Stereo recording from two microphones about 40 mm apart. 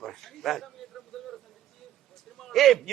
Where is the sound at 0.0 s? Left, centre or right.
Centre.